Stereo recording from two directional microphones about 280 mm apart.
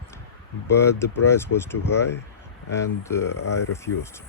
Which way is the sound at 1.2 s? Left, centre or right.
Centre.